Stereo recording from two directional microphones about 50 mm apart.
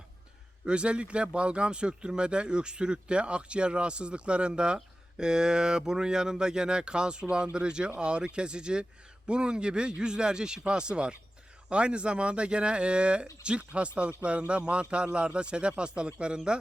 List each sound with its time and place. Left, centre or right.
0.6 s speech: right